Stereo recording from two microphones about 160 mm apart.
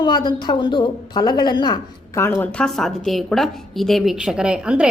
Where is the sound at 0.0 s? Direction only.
25° left (ahead or behind).